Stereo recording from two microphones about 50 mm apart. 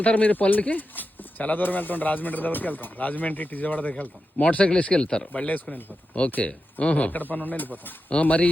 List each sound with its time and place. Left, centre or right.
0.0 s speech: left
5.3 s speech: left